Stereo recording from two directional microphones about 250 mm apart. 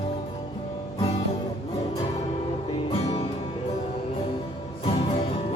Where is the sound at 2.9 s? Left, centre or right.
Left.